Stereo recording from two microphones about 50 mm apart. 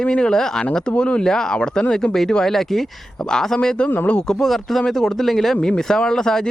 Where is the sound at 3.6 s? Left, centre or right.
Centre.